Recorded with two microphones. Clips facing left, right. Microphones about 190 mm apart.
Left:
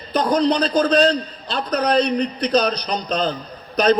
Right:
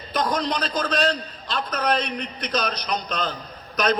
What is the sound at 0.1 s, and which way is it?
A man's voice, 35° left (ahead or behind).